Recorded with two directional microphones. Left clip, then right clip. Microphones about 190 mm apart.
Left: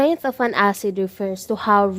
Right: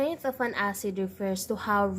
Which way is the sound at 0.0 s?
45° left (ahead or behind).